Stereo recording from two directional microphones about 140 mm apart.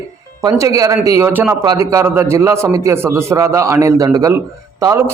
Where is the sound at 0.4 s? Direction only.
25° right (ahead or behind).